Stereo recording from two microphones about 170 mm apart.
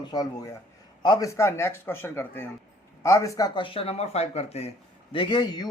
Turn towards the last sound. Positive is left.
turn(degrees=25)  # may be behind; listen again after turning